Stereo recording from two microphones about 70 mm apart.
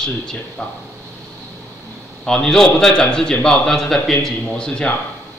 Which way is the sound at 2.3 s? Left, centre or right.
Centre.